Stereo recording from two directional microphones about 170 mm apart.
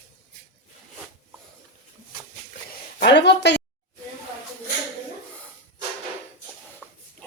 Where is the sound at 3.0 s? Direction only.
90° left.